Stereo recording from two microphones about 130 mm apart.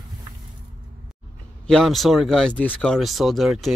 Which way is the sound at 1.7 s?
Centre (ahead or behind).